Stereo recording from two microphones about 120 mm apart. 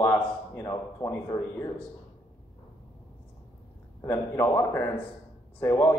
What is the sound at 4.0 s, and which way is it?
Speech, 20° left (ahead or behind).